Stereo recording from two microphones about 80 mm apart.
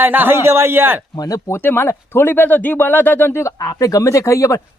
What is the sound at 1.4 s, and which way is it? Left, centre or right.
Speech, left.